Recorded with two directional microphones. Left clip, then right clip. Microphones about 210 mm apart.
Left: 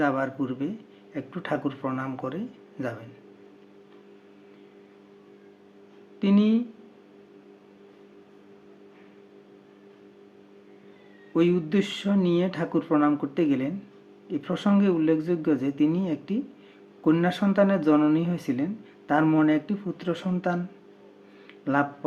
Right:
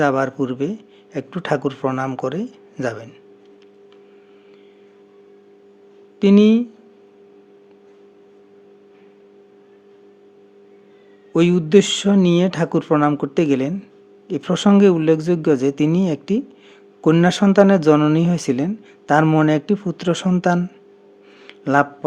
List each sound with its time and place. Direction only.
0.0 s speech: 45° right (ahead or behind)
6.1 s speech: 50° right (ahead or behind)
11.3 s speech: 45° right (ahead or behind)
21.4 s a sound: 50° right (ahead or behind)